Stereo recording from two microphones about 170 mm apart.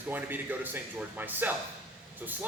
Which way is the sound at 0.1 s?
10° right (ahead or behind).